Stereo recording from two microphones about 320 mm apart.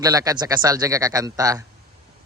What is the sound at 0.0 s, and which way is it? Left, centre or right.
A man's voice, centre.